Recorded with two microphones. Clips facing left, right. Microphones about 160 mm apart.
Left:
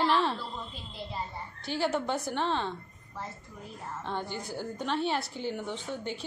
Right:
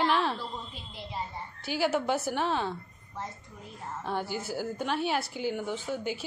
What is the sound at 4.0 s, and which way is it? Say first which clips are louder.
Speech: right 3 dB; 5° right (ahead or behind).